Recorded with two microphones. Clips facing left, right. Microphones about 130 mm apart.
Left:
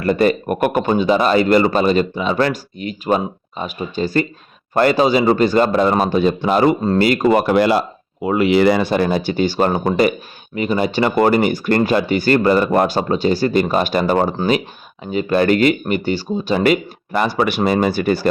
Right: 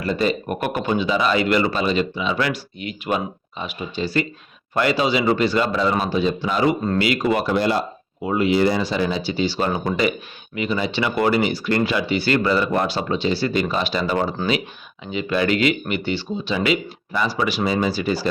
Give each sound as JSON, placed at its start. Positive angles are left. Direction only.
{"t": 0.0, "sound": "speech", "side_deg": 55}
{"t": 6.8, "sound": "speech", "side_deg": 40}
{"t": 7.5, "sound": "speech", "side_deg": 85}